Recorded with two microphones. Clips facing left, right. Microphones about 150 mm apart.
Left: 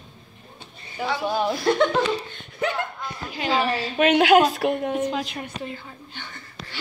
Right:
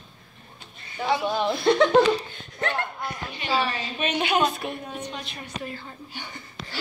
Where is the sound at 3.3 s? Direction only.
90° left.